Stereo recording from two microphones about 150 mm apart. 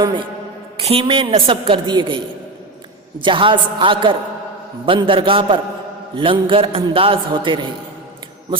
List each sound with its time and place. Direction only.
0.0 s a man's voice: 35° right (ahead or behind)